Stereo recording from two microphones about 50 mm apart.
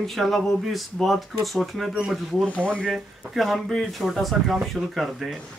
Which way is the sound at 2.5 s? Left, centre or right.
Left.